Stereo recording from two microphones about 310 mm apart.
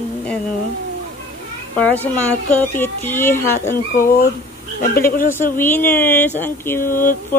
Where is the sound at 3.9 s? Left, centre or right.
Left.